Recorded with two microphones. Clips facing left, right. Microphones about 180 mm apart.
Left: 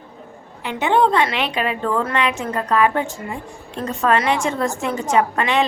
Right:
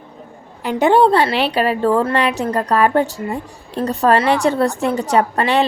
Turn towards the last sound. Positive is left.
turn(degrees=-35)  # may be behind; listen again after turning